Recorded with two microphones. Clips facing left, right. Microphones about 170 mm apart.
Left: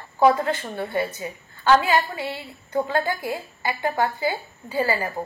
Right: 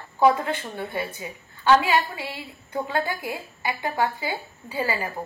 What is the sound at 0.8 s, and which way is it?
A woman's voice, 15° right (ahead or behind).